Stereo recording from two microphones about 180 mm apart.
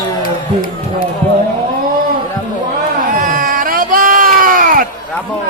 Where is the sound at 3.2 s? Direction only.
50° right (ahead or behind).